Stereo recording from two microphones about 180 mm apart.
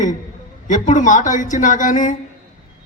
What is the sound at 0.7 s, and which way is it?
A man's voice, 45° left (ahead or behind).